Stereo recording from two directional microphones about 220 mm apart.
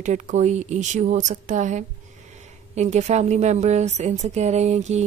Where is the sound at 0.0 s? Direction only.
35° right (ahead or behind).